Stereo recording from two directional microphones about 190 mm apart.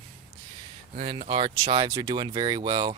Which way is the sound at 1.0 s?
30° right (ahead or behind).